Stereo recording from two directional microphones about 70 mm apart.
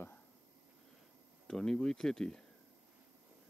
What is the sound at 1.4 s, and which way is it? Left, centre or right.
Speech, centre.